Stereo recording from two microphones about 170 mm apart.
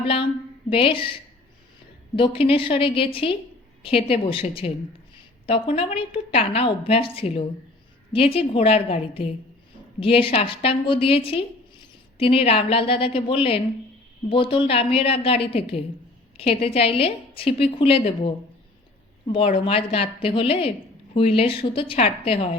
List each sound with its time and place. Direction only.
0.0 s a woman's voice: 30° left (ahead or behind)